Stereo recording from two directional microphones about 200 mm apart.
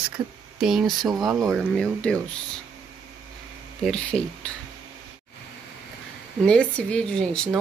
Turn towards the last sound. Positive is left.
turn(degrees=5)  # may be behind; listen again after turning